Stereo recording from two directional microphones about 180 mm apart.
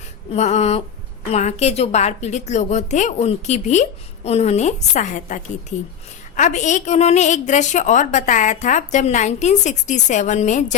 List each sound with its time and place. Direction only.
0.3 s a woman's voice: 40° left (ahead or behind)